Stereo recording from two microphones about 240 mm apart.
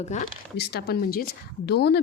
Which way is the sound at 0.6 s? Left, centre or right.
Left.